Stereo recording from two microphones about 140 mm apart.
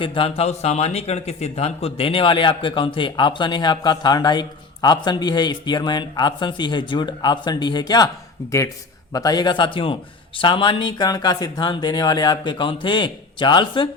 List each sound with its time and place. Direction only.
0.0 s speech: 40° left (ahead or behind)
9.1 s speech: 30° left (ahead or behind)